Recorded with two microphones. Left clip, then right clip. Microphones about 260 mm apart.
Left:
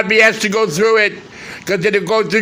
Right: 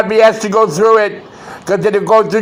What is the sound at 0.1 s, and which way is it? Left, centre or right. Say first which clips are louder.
A man's voice: right 1 dB; centre.